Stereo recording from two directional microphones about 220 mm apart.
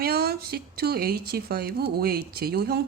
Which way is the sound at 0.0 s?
45° right (ahead or behind).